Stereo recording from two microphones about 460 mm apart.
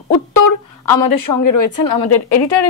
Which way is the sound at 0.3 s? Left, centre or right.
Left.